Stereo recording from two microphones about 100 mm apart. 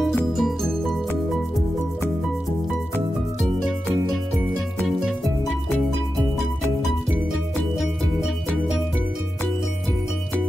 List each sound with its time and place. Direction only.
0.1 s music: 5° left (ahead or behind)
6.1 s music: centre (ahead or behind)